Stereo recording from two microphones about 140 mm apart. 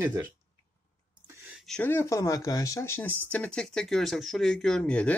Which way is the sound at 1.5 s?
5° left (ahead or behind).